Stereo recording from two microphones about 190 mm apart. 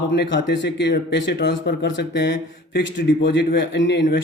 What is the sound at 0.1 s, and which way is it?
A man's voice, 70° left (ahead or behind).